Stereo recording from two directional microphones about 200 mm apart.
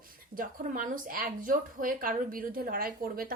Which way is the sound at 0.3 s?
45° right (ahead or behind).